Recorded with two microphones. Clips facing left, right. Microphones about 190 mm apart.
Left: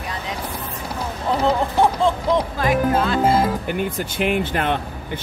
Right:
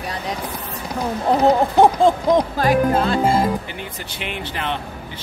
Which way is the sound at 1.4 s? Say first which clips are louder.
Right 4 dB; 40° right (ahead or behind).